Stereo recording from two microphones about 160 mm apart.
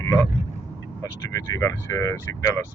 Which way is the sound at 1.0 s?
20° left (ahead or behind).